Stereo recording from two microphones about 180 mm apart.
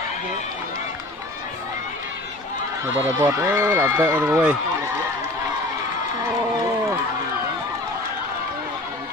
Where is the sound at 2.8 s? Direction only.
15° right (ahead or behind).